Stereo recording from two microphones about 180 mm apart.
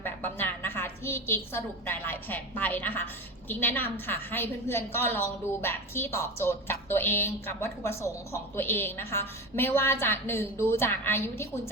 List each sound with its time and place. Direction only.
0.0 s a woman's voice: 10° left (ahead or behind)